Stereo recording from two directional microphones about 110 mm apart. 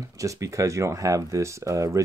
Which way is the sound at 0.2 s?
30° right (ahead or behind).